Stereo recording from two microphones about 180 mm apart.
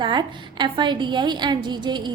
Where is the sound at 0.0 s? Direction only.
25° right (ahead or behind).